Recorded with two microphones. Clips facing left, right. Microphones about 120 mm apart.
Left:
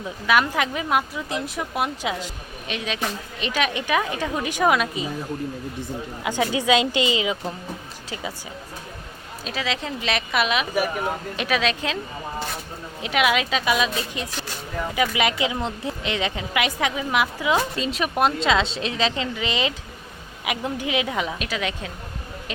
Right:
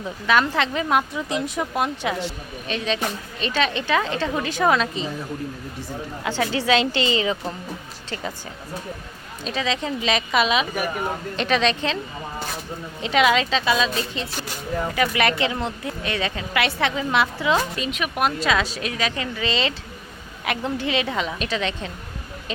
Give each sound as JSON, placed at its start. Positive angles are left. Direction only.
{"t": 0.3, "sound": "speech", "side_deg": 10}
{"t": 6.2, "sound": "speech", "side_deg": 15}
{"t": 9.4, "sound": "speech", "side_deg": 5}
{"t": 13.0, "sound": "speech", "side_deg": 5}
{"t": 17.7, "sound": "a woman's voice", "side_deg": 30}